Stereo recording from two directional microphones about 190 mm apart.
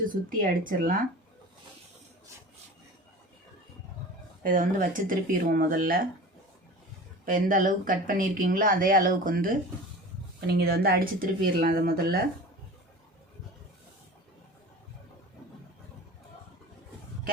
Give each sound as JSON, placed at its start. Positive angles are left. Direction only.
{"t": 0.0, "sound": "speech", "side_deg": -45}
{"t": 4.4, "sound": "speech", "side_deg": -45}
{"t": 7.3, "sound": "speech", "side_deg": -45}